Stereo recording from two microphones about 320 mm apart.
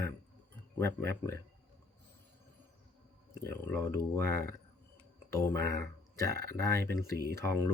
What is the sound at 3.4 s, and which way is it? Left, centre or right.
Speech, centre.